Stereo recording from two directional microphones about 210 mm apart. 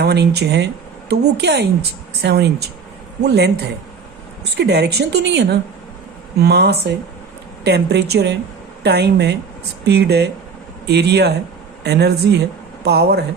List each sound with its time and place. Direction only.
0.0 s a woman's voice: 50° right (ahead or behind)
4.5 s a woman's voice: 55° right (ahead or behind)